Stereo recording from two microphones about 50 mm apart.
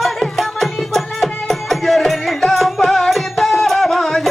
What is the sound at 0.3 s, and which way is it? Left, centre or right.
Music, centre.